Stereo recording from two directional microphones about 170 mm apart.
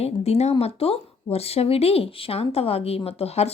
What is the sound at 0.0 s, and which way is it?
A woman's voice, 40° left (ahead or behind).